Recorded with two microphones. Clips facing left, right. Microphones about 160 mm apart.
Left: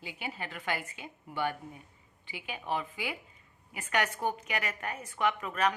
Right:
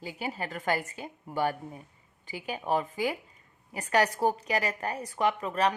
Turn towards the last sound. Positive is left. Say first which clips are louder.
# right 3 dB
turn(degrees=-30)  # may be behind; listen again after turning